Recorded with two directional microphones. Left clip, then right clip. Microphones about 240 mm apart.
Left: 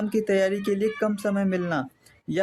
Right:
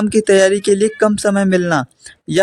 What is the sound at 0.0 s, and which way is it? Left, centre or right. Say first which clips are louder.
Speech: right 12 dB; right.